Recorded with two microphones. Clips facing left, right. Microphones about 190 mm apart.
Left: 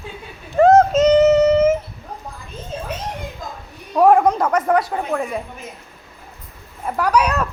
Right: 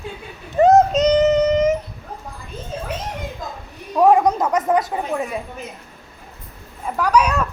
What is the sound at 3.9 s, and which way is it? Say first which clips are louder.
Speech: left 1 dB; centre (ahead or behind).